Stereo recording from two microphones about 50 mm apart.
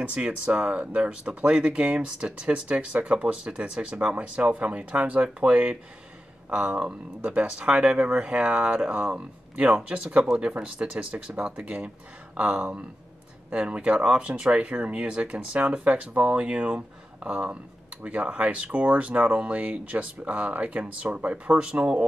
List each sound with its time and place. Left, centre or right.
0.0 s speech: right